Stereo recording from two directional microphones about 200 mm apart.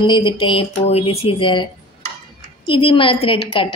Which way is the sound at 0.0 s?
25° left (ahead or behind).